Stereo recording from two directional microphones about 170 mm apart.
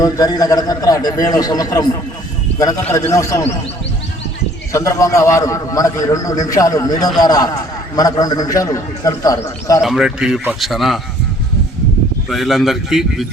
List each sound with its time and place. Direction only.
0.0 s a man's voice: 20° left (ahead or behind)
4.7 s a man's voice: 20° left (ahead or behind)
9.8 s a man's voice: 5° right (ahead or behind)
12.3 s a man's voice: centre (ahead or behind)